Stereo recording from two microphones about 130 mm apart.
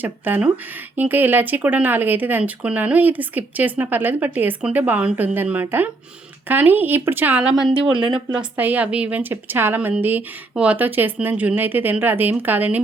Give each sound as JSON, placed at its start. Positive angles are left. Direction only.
{"t": 0.0, "sound": "speech", "side_deg": -15}
{"t": 7.6, "sound": "speech", "side_deg": -40}
{"t": 8.0, "sound": "speech", "side_deg": -10}